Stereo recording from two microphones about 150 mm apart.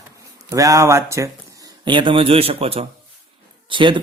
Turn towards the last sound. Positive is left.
turn(degrees=-35)  # may be behind; listen again after turning